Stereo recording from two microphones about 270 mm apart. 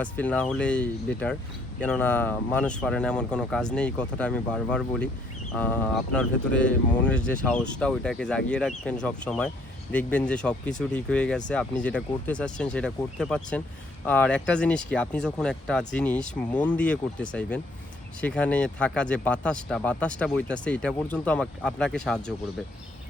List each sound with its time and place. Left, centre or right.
0.0 s speech: centre